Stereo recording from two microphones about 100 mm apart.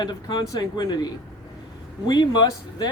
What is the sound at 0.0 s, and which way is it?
Speech, 40° left (ahead or behind).